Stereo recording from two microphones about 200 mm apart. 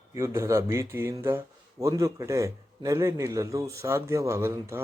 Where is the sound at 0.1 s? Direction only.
15° right (ahead or behind).